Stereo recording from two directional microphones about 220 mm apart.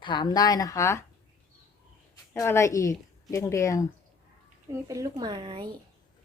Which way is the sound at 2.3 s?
10° left (ahead or behind).